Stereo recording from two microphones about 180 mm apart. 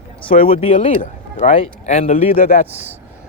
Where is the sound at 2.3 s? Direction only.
50° left (ahead or behind).